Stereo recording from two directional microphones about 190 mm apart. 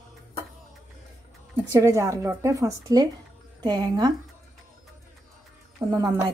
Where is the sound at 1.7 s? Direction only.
15° right (ahead or behind).